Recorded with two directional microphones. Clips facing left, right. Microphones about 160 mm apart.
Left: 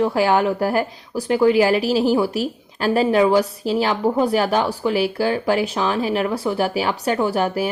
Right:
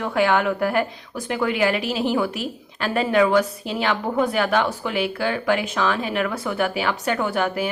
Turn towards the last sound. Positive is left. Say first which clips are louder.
# left 3 dB
turn(degrees=35)  # may be behind; listen again after turning